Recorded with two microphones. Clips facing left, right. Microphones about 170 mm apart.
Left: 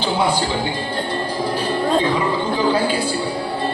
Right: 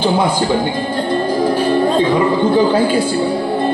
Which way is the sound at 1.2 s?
50° right (ahead or behind).